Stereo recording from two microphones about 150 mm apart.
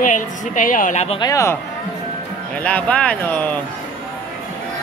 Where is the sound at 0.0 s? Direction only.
60° left (ahead or behind).